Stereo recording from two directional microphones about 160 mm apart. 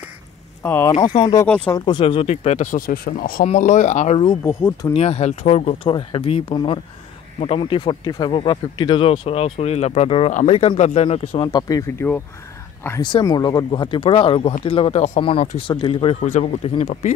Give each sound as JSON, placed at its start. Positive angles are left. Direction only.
{"t": 0.6, "sound": "speech", "side_deg": 15}
{"t": 1.0, "sound": "speech", "side_deg": 35}
{"t": 3.5, "sound": "speech", "side_deg": 50}
{"t": 4.2, "sound": "speech", "side_deg": 30}
{"t": 4.6, "sound": "speech", "side_deg": 15}
{"t": 4.9, "sound": "speech", "side_deg": 40}
{"t": 5.9, "sound": "speech", "side_deg": 35}
{"t": 11.3, "sound": "speech", "side_deg": 25}
{"t": 13.0, "sound": "speech", "side_deg": 25}